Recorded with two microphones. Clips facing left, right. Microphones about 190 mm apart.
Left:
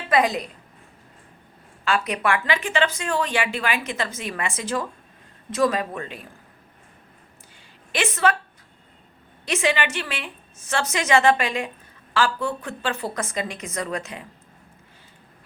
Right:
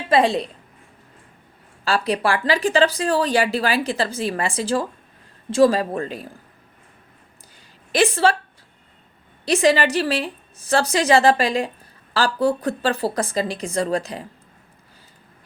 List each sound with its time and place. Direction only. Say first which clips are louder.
0.1 s a woman's voice: right 3 dB; 30° right (ahead or behind)
1.8 s speech: right 3 dB; 35° right (ahead or behind)
7.9 s speech: right 5 dB; 30° right (ahead or behind)
9.5 s speech: right 6 dB; 35° right (ahead or behind)